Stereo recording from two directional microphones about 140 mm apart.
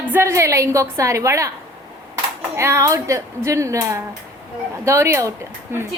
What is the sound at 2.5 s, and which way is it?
A woman's voice, 20° right (ahead or behind).